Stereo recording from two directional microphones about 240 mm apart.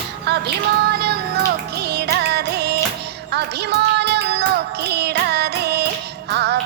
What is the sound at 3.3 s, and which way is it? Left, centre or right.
Child singing, right.